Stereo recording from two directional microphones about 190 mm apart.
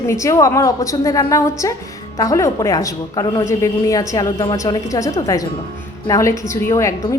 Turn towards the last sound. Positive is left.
turn(degrees=15)  # may be behind; listen again after turning